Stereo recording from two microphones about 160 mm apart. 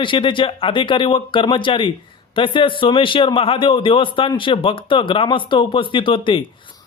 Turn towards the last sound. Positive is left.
turn(degrees=35)  # may be behind; listen again after turning